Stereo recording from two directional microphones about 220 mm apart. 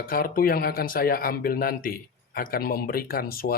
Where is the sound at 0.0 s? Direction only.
40° left (ahead or behind).